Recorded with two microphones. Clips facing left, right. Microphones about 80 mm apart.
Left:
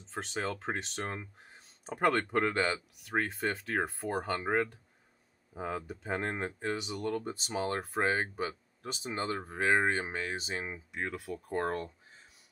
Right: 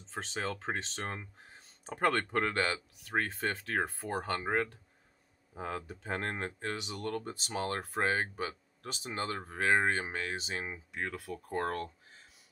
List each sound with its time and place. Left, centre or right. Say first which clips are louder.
0.1 s speech: left 1 dB; centre
10.0 s speech: left 1 dB; centre